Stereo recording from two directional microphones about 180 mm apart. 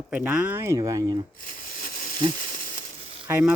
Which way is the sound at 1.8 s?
50° left (ahead or behind).